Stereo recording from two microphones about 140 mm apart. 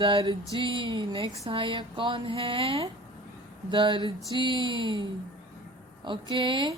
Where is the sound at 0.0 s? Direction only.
40° right (ahead or behind).